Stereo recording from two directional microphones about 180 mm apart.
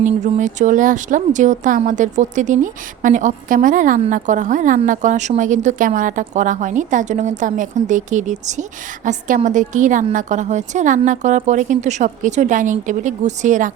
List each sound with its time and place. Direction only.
0.0 s a woman's voice: 45° right (ahead or behind)